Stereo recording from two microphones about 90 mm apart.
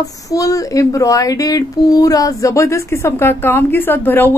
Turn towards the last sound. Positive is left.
turn(degrees=20)  # may be behind; listen again after turning